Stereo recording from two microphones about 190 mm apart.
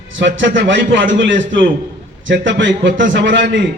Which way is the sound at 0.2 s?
70° right (ahead or behind).